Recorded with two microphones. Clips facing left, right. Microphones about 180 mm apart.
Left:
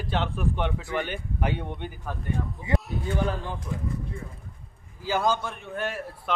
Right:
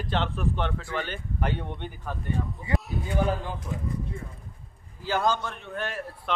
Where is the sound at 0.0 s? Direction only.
10° left (ahead or behind).